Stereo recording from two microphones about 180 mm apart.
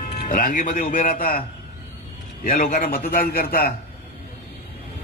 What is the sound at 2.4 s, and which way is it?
A man's voice, 50° left (ahead or behind).